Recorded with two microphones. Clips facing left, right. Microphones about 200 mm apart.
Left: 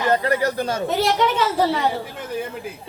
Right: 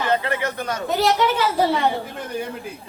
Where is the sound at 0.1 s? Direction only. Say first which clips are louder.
Left 4 dB; 40° left (ahead or behind).